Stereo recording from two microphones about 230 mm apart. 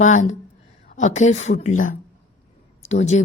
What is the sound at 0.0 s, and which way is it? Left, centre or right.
A woman's voice, left.